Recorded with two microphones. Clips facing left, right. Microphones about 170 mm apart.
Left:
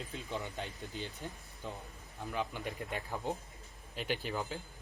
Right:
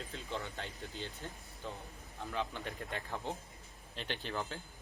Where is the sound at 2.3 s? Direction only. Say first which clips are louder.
Left 2 dB; 10° left (ahead or behind).